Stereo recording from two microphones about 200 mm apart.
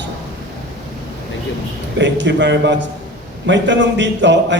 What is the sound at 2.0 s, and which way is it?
A woman's voice, 65° right (ahead or behind).